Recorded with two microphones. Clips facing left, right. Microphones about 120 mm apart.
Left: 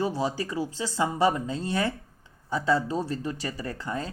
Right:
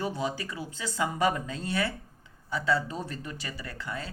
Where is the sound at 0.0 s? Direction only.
30° left (ahead or behind).